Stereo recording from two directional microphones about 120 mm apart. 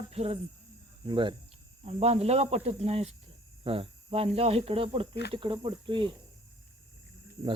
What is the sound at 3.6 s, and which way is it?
Speech, 50° right (ahead or behind).